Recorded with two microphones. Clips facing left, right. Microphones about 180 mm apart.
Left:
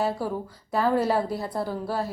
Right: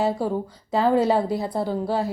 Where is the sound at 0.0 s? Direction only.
25° right (ahead or behind).